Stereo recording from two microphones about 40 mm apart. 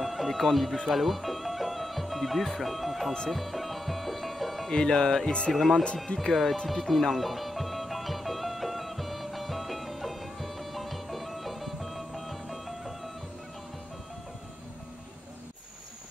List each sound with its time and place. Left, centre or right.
0.0 s a sound: centre
0.8 s speech: centre
3.3 s music: centre
4.6 s speech: centre
5.5 s speech: centre
6.1 s speech: left
6.7 s music: centre